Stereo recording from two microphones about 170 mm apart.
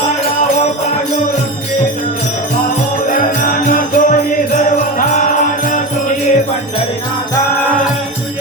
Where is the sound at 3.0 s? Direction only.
50° left (ahead or behind).